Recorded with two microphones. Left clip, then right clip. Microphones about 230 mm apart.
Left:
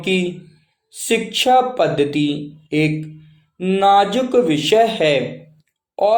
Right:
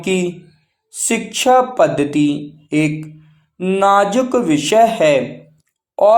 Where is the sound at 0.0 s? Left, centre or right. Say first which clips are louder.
Right 1 dB; centre.